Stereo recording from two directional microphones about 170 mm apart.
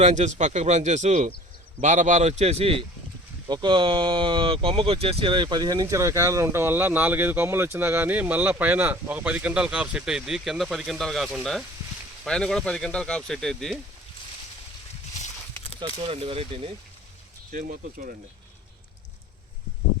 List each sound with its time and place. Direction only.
0.0 s speech: 45° right (ahead or behind); by 13.7 s centre (ahead or behind)
16.0 s speech: 30° right (ahead or behind)
17.5 s speech: 55° right (ahead or behind)